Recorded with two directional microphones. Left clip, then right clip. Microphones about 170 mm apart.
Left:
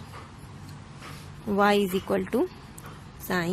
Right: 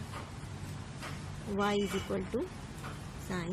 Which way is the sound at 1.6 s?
55° left (ahead or behind).